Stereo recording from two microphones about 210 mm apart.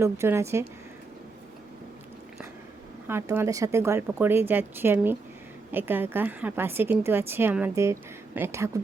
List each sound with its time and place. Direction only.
0.0 s a woman's voice: 10° right (ahead or behind)
3.1 s a woman's voice: 10° right (ahead or behind)